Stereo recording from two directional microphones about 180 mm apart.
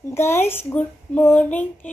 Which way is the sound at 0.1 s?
15° left (ahead or behind).